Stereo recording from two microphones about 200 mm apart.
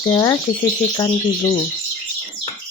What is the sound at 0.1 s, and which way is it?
Speech, 15° left (ahead or behind).